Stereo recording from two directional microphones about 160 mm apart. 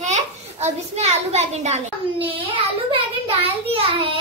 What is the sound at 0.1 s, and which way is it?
A child's voice, 45° right (ahead or behind).